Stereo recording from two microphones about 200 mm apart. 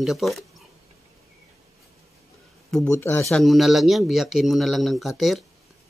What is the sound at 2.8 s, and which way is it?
Speech, 15° left (ahead or behind).